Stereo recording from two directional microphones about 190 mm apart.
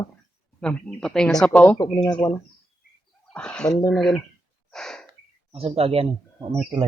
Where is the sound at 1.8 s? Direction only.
25° left (ahead or behind).